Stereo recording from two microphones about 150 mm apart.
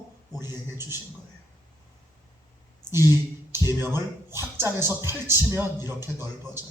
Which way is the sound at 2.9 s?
15° right (ahead or behind).